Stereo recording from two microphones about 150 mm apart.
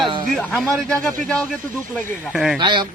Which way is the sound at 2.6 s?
30° right (ahead or behind).